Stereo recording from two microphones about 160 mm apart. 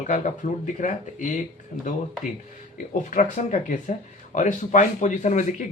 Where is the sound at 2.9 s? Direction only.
50° left (ahead or behind).